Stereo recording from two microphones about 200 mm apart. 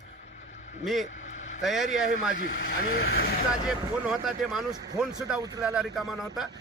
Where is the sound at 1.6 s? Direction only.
Centre (ahead or behind).